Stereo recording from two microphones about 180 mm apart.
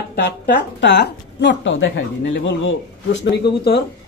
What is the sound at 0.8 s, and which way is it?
Speech, 75° left (ahead or behind).